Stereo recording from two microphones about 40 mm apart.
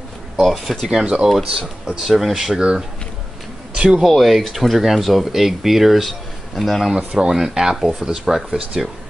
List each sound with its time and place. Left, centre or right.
0.4 s speech: centre
0.8 s speech: right
1.5 s speech: right
2.0 s speech: centre
3.7 s a sound: right
4.0 s speech: centre
7.2 s speech: centre